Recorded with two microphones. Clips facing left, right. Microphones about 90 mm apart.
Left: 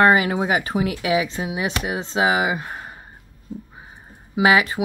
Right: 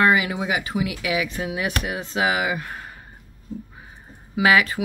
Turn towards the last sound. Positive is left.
turn(degrees=25)  # may be behind; listen again after turning